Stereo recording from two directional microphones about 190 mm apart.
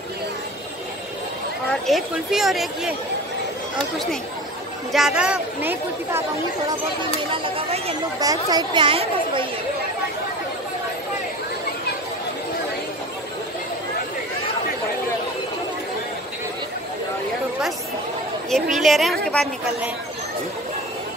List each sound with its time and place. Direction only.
1.7 s speech: centre (ahead or behind)
7.4 s a sound: 30° right (ahead or behind)
8.2 s speech: 20° right (ahead or behind)
18.8 s speech: centre (ahead or behind)